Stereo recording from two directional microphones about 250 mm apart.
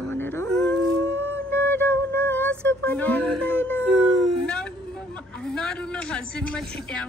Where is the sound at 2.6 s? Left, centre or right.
Centre.